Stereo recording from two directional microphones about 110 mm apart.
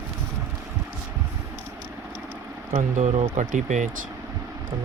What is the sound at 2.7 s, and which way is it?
Speech, 90° right.